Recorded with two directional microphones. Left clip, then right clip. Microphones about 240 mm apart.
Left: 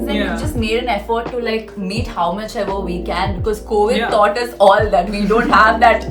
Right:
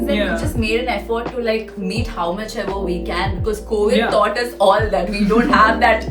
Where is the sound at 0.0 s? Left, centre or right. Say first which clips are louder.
Right 1 dB; centre.